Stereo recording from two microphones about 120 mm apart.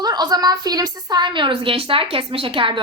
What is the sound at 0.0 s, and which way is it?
A woman's voice, 35° right (ahead or behind).